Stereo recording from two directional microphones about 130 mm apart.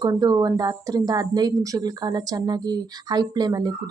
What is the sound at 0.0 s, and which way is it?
A woman's voice, 30° right (ahead or behind).